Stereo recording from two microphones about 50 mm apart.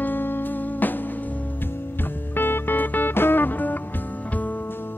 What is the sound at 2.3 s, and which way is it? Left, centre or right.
Music, left.